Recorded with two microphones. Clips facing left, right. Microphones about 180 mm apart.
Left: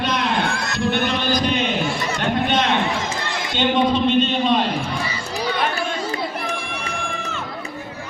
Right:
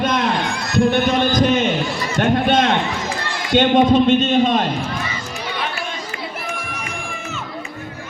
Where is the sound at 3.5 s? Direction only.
50° right (ahead or behind).